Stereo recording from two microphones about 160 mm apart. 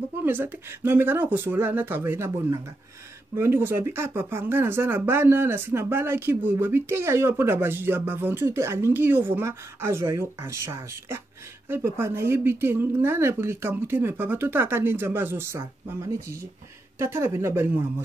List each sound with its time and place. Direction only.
0.2 s speech: 15° right (ahead or behind)